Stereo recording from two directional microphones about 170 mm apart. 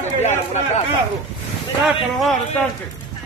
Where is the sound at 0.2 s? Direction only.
40° left (ahead or behind).